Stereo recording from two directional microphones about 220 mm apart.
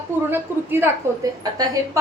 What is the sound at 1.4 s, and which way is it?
Speech, 15° right (ahead or behind).